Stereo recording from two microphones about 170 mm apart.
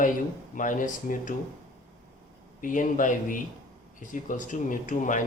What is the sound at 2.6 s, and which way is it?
Speech, 50° left (ahead or behind).